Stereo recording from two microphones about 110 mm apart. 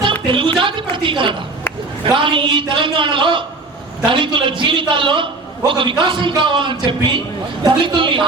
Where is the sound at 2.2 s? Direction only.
50° right (ahead or behind).